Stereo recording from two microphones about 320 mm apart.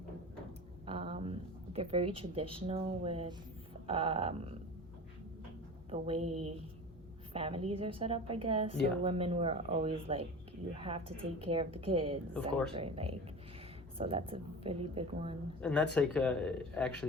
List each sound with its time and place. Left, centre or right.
0.9 s a woman's voice: centre
6.1 s speech: right
7.3 s a woman's voice: centre
15.6 s speech: centre